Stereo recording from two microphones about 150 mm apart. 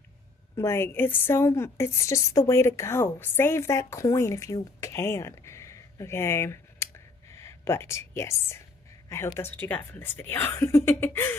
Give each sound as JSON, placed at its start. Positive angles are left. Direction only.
{"t": 0.6, "sound": "a woman's voice", "side_deg": 15}